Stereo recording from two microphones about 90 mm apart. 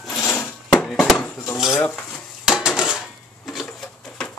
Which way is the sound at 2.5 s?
5° right (ahead or behind).